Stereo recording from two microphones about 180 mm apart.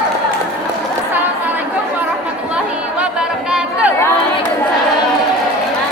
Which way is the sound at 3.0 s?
5° right (ahead or behind).